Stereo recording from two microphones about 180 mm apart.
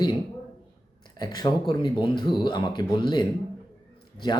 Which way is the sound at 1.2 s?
25° left (ahead or behind).